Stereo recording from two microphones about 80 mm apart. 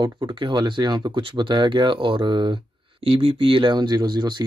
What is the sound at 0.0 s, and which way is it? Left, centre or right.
Speech, right.